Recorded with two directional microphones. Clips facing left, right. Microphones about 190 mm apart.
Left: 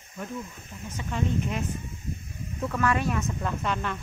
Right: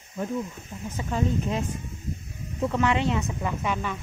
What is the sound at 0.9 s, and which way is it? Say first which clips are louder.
Speech: right 2 dB; 35° right (ahead or behind).